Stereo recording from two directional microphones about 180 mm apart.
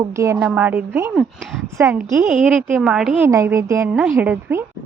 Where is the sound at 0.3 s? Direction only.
5° right (ahead or behind).